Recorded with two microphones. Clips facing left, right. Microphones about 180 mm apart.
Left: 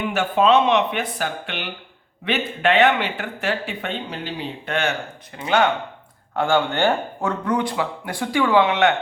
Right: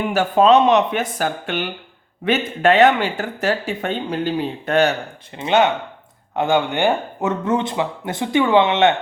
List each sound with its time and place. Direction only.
0.0 s speech: 40° right (ahead or behind)
5.4 s speech: 25° right (ahead or behind)